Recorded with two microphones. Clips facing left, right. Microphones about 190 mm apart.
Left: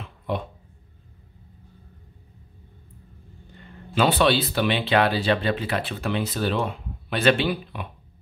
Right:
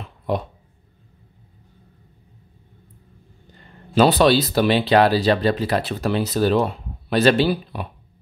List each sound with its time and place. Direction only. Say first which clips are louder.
0.3 s speech: right 4 dB; 40° right (ahead or behind)
3.9 s speech: right 5 dB; 40° right (ahead or behind)